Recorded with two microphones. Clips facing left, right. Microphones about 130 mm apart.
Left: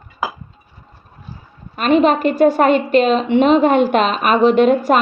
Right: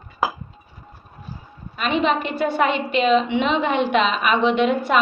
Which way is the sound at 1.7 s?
45° left (ahead or behind).